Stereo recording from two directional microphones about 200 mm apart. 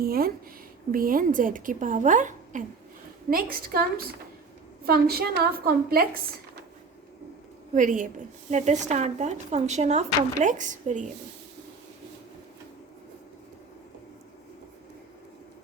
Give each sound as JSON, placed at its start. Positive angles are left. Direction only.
{"t": 0.0, "sound": "a woman's voice", "side_deg": -50}
{"t": 7.8, "sound": "speech", "side_deg": -40}